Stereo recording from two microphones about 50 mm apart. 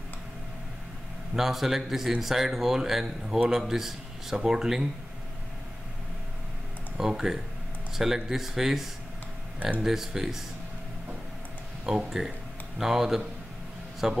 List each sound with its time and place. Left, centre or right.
1.3 s speech: centre
7.0 s speech: centre
9.6 s speech: right
9.8 s speech: centre
12.0 s speech: centre